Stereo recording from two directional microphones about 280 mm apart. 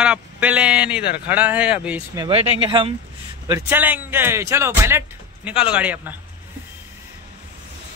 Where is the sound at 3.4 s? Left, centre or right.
Centre.